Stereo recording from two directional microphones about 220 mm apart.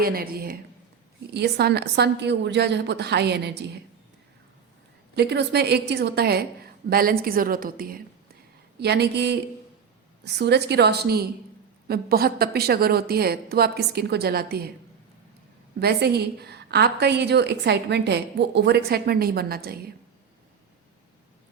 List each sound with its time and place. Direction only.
0.0 s a woman's voice: 45° right (ahead or behind)
5.1 s a woman's voice: 50° right (ahead or behind)
15.8 s a woman's voice: 45° right (ahead or behind)